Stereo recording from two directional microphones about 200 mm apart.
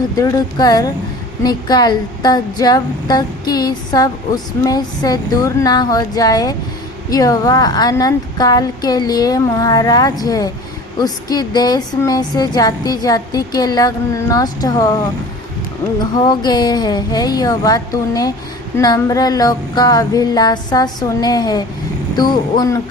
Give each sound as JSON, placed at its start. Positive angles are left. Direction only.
{"t": 0.2, "sound": "speech", "side_deg": 20}
{"t": 16.1, "sound": "speech", "side_deg": 20}